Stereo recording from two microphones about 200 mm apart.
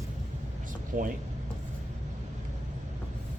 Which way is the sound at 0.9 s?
40° right (ahead or behind).